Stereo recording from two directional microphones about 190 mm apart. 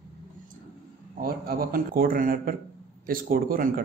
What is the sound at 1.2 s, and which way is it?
Speech, 50° right (ahead or behind).